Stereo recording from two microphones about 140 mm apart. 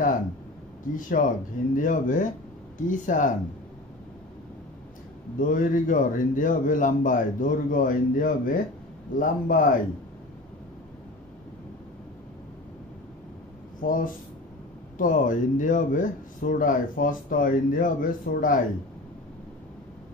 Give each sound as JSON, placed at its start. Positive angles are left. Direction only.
{"t": 0.9, "sound": "speech", "side_deg": 75}
{"t": 5.4, "sound": "speech", "side_deg": 75}
{"t": 13.7, "sound": "speech", "side_deg": 75}